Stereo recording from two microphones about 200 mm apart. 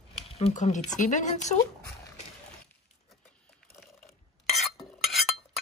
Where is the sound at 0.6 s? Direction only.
40° left (ahead or behind).